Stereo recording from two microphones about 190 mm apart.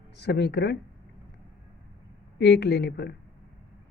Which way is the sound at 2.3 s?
60° left (ahead or behind).